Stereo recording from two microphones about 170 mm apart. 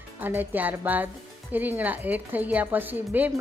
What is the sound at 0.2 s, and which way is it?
A woman's voice, 10° right (ahead or behind).